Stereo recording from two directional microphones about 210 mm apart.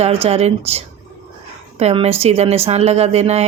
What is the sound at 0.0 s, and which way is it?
A woman's voice, 30° right (ahead or behind).